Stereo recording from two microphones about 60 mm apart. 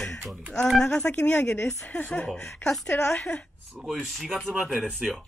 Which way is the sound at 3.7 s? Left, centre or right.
Centre.